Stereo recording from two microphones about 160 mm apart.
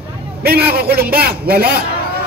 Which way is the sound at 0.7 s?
75° right (ahead or behind).